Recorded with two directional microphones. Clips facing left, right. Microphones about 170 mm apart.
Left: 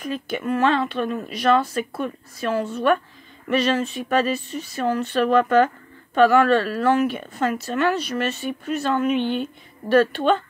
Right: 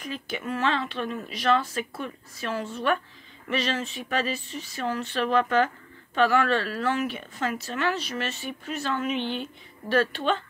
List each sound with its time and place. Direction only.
0.0 s a woman's voice: 50° left (ahead or behind)